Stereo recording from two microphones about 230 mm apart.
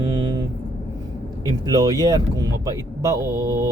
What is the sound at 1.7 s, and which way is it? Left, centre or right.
Speech, centre.